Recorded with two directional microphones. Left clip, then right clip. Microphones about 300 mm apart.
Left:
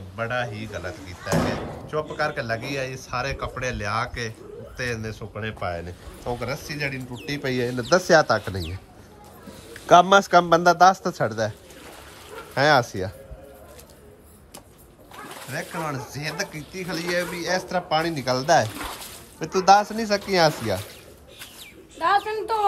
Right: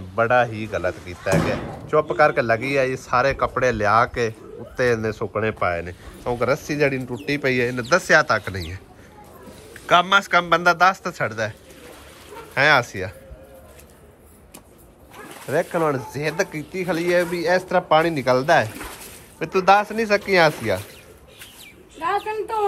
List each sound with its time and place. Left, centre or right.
0.1 s a man's voice: centre
9.8 s speech: centre
12.5 s speech: centre
15.5 s speech: centre
21.9 s a sound: centre